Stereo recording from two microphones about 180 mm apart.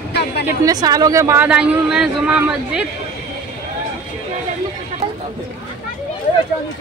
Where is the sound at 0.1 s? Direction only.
65° left (ahead or behind).